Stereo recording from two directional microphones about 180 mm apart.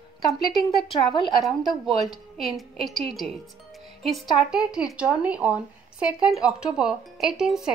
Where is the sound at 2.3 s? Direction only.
Centre (ahead or behind).